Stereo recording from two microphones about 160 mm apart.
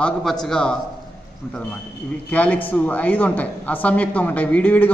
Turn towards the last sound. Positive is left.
turn(degrees=10)  # may be behind; listen again after turning